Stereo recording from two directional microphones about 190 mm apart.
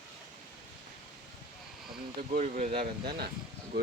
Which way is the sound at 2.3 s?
40° right (ahead or behind).